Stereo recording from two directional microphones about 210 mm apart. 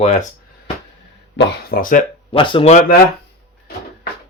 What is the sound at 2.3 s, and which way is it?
Speech, 25° left (ahead or behind).